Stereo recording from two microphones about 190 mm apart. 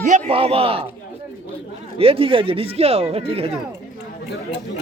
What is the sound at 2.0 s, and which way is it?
Speech, 30° right (ahead or behind).